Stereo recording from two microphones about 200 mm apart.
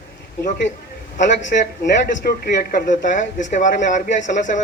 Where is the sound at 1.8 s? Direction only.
45° left (ahead or behind).